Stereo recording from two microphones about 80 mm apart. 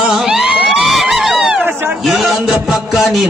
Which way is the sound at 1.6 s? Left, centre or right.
Right.